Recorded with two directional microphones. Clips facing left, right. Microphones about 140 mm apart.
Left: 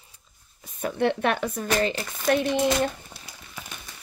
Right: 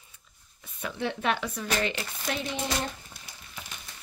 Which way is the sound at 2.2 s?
55° left (ahead or behind).